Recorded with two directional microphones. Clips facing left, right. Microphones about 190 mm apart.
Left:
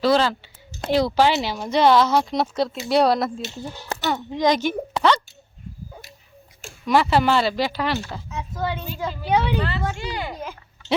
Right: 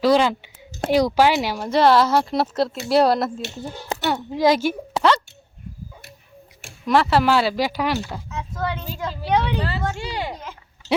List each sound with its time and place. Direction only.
0.0 s a woman's voice: 15° right (ahead or behind)
6.8 s speech: centre (ahead or behind)
9.6 s speech: 35° right (ahead or behind)